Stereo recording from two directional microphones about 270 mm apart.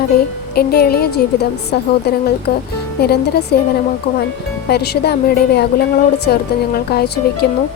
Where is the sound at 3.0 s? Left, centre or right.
Left.